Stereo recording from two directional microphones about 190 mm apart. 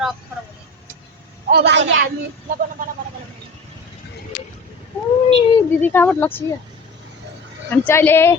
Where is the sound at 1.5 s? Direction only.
65° right (ahead or behind).